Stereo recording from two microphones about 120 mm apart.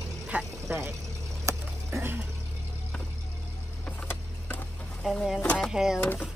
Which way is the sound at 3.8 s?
15° left (ahead or behind).